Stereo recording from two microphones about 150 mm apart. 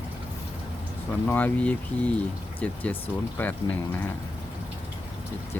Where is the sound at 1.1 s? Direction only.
10° left (ahead or behind).